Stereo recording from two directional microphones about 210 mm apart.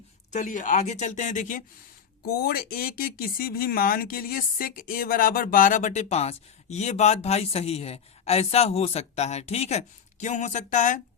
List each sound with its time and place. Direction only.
0.3 s speech: 35° left (ahead or behind)